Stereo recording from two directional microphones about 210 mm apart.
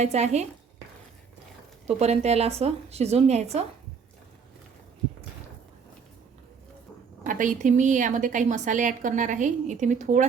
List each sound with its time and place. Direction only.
0.0 s a woman's voice: 30° right (ahead or behind)
1.9 s a woman's voice: 30° right (ahead or behind)
7.3 s a woman's voice: 40° right (ahead or behind)